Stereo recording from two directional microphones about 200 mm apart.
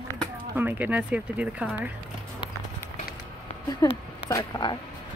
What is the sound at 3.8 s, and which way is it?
Speech, 15° left (ahead or behind).